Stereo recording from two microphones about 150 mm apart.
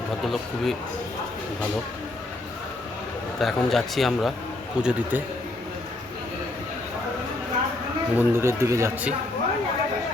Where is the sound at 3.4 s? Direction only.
Centre (ahead or behind).